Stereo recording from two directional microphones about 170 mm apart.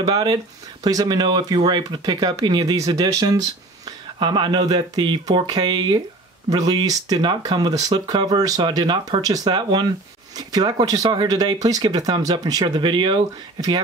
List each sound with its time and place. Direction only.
0.0 s speech: 25° right (ahead or behind)